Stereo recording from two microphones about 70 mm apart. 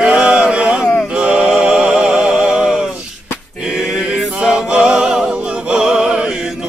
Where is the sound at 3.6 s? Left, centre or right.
Centre.